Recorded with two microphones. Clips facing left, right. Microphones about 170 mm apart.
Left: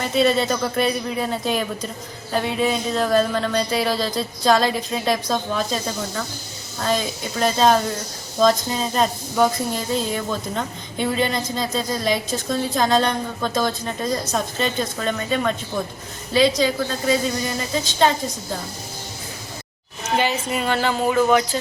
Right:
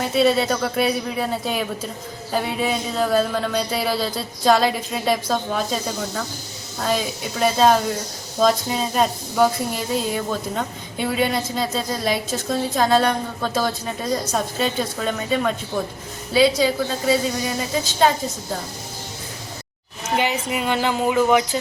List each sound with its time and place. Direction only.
0.0 s a woman's voice: 5° right (ahead or behind)
20.1 s speech: 15° right (ahead or behind)